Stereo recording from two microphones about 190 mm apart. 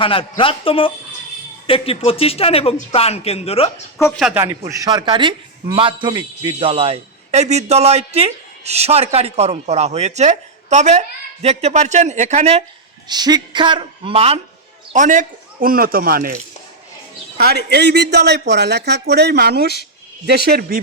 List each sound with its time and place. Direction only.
0.0 s speech: 30° left (ahead or behind)
4.2 s speech: 5° right (ahead or behind)
4.4 s a man's voice: 20° right (ahead or behind); by 12.6 s 35° right (ahead or behind)
13.1 s a man's voice: 20° right (ahead or behind)
14.9 s a man's voice: 40° right (ahead or behind)
17.3 s a man's voice: 60° right (ahead or behind)